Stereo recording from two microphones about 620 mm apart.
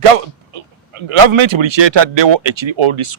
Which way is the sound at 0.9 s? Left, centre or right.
Right.